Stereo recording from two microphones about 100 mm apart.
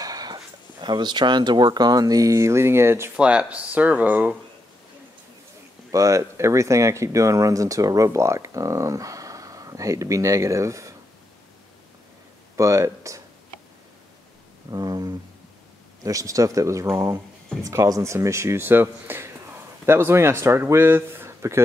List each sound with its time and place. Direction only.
0.0 s speech: 40° right (ahead or behind); by 3.1 s 25° right (ahead or behind)
3.2 s speech: 10° right (ahead or behind)
5.9 s speech: 35° right (ahead or behind)
12.5 s speech: 30° right (ahead or behind)
14.7 s speech: 40° right (ahead or behind)